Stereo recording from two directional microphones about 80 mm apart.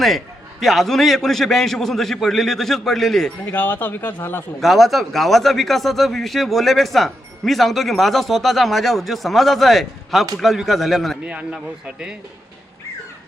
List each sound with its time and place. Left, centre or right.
0.6 s speech: centre
3.5 s speech: left
4.6 s speech: centre
11.3 s a man's voice: centre